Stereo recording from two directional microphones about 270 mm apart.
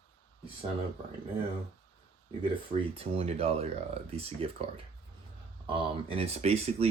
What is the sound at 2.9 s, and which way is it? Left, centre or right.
Speech, right.